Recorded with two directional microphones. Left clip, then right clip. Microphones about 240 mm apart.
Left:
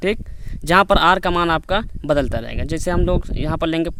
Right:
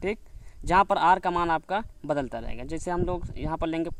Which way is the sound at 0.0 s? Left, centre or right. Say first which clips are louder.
Left 10 dB; left.